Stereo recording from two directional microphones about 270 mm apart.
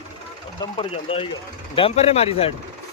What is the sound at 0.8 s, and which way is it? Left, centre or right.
Speech, centre.